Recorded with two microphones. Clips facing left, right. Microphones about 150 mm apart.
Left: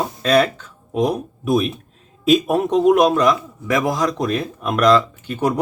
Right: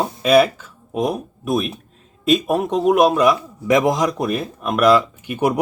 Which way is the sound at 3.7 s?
20° right (ahead or behind).